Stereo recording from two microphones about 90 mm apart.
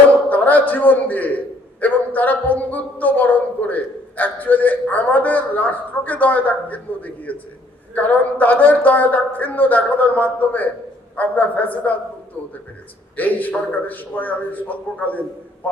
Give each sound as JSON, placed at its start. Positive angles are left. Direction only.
{"t": 0.1, "sound": "a sound", "side_deg": 20}
{"t": 0.7, "sound": "a woman's voice", "side_deg": 20}
{"t": 13.1, "sound": "a woman's voice", "side_deg": 20}